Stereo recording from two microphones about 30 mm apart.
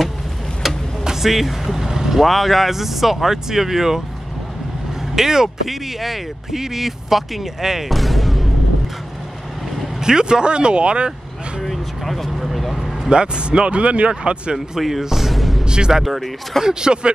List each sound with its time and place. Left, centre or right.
1.0 s a sound: centre
1.3 s speech: centre
2.2 s speech: centre
5.1 s speech: centre
5.7 s speech: centre
7.9 s music: centre
9.9 s speech: right
11.6 s vehicle: centre
13.1 s speech: right
14.8 s speech: centre
15.6 s music: right
16.0 s speech: centre
16.6 s speech: right